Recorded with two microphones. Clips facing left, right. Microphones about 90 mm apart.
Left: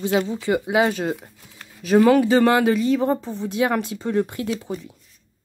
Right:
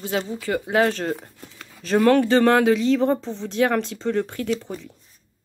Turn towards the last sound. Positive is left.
turn(degrees=10)  # may be behind; listen again after turning